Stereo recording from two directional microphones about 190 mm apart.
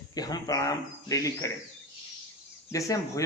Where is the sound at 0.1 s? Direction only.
20° left (ahead or behind).